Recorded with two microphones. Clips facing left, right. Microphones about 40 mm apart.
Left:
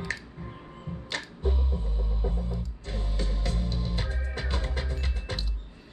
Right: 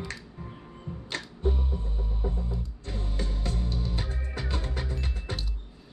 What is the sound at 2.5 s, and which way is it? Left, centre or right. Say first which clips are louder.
Music: even; left.